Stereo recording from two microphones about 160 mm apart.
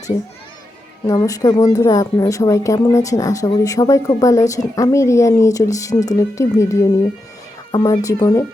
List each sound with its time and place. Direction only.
1.0 s a woman's voice: 25° left (ahead or behind)